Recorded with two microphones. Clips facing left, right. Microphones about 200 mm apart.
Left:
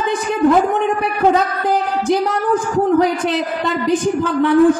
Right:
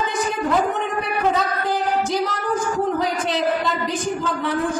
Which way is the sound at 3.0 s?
60° left (ahead or behind).